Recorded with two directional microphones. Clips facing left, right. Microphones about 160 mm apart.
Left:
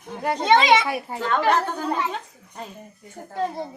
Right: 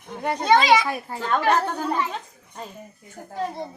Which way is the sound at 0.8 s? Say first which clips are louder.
Left 1 dB; 10° left (ahead or behind).